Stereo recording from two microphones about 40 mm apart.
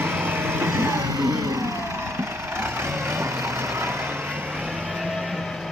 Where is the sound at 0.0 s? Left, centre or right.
Right.